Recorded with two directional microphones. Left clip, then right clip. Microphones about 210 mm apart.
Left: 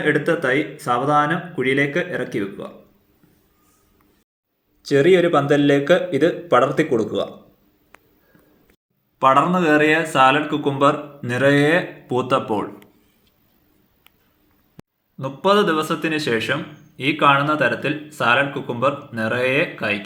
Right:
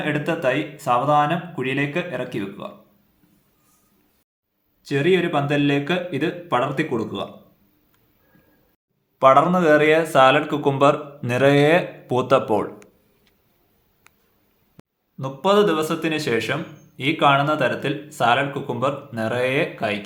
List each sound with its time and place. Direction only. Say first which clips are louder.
0.0 s speech: left 3 dB; 10° right (ahead or behind)
4.9 s speech: left 5 dB; 10° right (ahead or behind)
9.1 s a man's voice: right 1 dB; 10° right (ahead or behind)
14.8 s a sound: left 5 dB; centre (ahead or behind)
15.2 s speech: left 1 dB; 10° right (ahead or behind)